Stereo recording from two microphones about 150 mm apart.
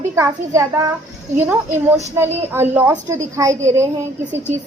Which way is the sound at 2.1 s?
15° right (ahead or behind).